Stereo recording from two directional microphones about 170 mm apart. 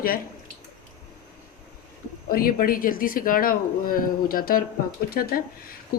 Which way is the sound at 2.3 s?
60° left (ahead or behind).